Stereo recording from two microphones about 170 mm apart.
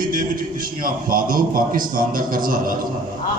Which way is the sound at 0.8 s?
55° right (ahead or behind).